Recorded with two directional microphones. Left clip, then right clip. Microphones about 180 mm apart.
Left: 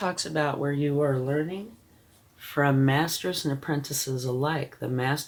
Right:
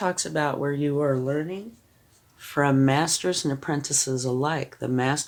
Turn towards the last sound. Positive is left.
turn(degrees=-55)  # may be behind; listen again after turning